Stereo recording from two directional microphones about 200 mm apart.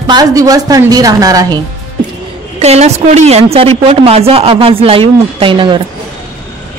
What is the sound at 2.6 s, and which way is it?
Speech, 30° right (ahead or behind).